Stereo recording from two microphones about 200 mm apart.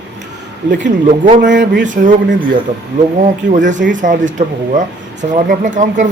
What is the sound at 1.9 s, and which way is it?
Speech, 40° right (ahead or behind).